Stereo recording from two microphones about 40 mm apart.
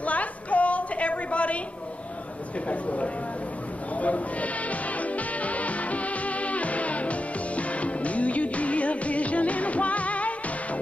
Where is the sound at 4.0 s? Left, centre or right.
Left.